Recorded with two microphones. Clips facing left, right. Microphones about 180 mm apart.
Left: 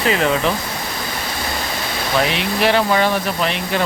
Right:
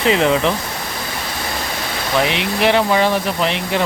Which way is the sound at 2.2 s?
20° right (ahead or behind).